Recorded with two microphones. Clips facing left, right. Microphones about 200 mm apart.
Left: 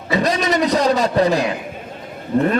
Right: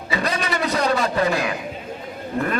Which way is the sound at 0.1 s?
40° left (ahead or behind).